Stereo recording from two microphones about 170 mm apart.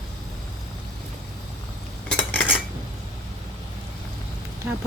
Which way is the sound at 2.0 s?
10° left (ahead or behind).